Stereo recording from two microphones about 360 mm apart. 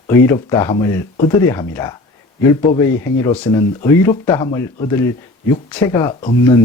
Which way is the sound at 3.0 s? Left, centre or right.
Centre.